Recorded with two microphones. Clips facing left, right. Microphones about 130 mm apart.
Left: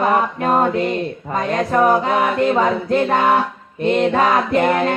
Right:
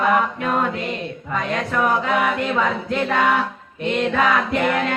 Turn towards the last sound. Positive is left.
turn(degrees=40)  # may be behind; listen again after turning